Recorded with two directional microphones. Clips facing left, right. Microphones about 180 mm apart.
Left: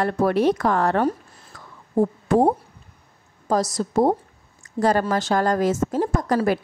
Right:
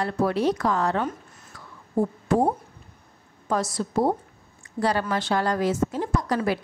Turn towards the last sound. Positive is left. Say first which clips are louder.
# left 4 dB
turn(degrees=50)  # may be behind; listen again after turning